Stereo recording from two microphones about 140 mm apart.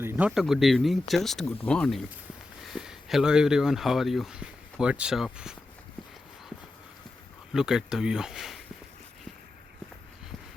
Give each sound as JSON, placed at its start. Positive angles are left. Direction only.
{"t": 0.0, "sound": "speech", "side_deg": -15}
{"t": 0.3, "sound": "speech", "side_deg": 0}
{"t": 2.6, "sound": "speech", "side_deg": -5}
{"t": 7.5, "sound": "speech", "side_deg": -5}